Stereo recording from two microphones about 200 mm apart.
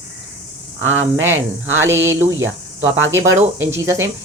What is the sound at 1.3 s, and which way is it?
Speech, 10° right (ahead or behind).